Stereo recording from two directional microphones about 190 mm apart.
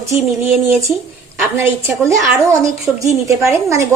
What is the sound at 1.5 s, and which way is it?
Speech, 15° right (ahead or behind).